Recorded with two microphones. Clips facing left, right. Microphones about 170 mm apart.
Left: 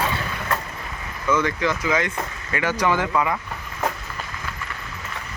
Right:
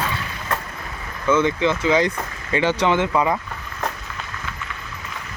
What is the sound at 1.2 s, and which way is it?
Speech, 25° right (ahead or behind).